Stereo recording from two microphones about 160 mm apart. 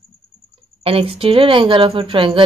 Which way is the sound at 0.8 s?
35° right (ahead or behind).